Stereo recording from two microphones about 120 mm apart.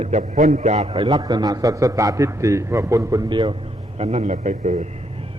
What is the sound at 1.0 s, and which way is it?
A man's voice, 30° right (ahead or behind).